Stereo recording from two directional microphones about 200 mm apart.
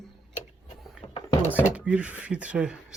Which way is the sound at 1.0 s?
30° left (ahead or behind).